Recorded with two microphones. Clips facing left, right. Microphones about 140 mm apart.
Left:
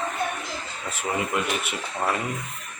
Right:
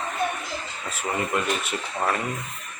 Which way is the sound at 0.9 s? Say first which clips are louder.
Even; 20° left (ahead or behind).